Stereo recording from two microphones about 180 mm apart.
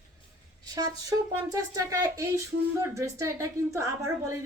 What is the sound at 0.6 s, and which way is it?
Speech, 20° right (ahead or behind).